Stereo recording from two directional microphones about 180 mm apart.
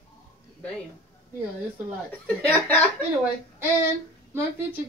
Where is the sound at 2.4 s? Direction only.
10° left (ahead or behind).